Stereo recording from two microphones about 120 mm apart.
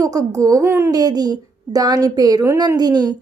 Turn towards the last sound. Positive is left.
turn(degrees=-35)  # may be behind; listen again after turning